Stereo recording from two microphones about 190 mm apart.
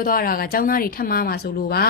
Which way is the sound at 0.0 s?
45° left (ahead or behind).